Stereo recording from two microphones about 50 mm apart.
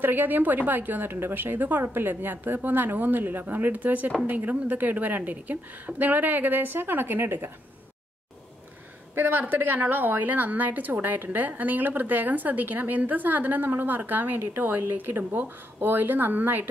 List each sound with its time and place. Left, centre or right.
0.0 s a woman's voice: right
9.1 s a woman's voice: right